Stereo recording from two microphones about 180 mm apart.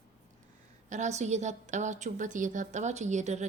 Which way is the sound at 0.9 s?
40° right (ahead or behind).